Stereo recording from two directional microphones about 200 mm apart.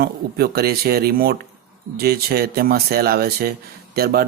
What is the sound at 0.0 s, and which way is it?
Speech, 50° right (ahead or behind).